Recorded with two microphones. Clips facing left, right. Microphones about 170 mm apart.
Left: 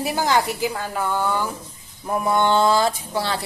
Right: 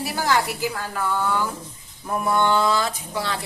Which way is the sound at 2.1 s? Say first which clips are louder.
Left 2 dB; 20° left (ahead or behind).